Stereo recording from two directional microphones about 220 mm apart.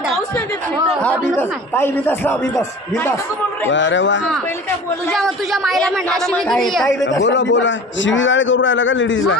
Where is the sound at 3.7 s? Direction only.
55° left (ahead or behind).